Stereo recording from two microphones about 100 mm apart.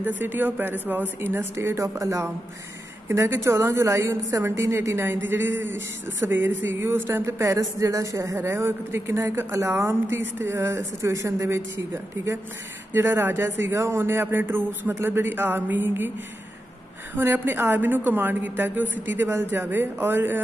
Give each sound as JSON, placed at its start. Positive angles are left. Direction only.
{"t": 0.0, "sound": "speech", "side_deg": -20}
{"t": 12.9, "sound": "speech", "side_deg": -20}
{"t": 17.1, "sound": "speech", "side_deg": -20}